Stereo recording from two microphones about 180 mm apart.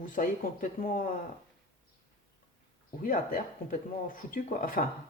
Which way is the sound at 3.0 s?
50° left (ahead or behind).